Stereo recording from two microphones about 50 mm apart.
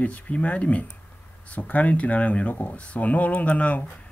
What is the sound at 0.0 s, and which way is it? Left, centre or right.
Speech, left.